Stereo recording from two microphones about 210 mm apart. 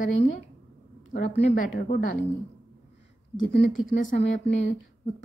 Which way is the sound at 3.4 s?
35° left (ahead or behind).